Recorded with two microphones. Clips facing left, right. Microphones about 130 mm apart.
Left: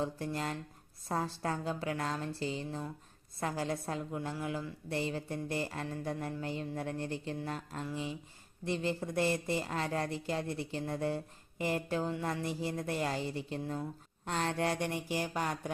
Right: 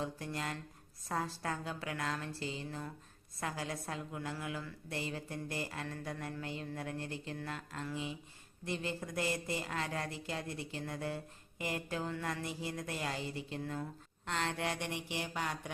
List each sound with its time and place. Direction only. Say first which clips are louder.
0.0 s speech: left 4 dB; 30° left (ahead or behind)